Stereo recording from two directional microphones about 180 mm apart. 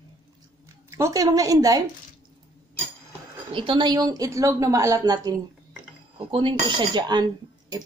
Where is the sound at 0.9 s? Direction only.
15° right (ahead or behind).